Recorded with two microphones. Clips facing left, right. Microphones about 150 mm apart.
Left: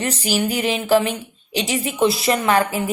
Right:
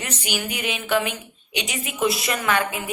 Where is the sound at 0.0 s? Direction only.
35° left (ahead or behind).